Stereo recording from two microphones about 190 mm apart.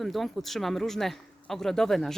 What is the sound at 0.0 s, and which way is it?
Speech, centre (ahead or behind).